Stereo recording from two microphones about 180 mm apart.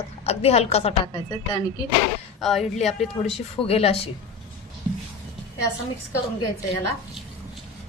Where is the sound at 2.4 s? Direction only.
Centre (ahead or behind).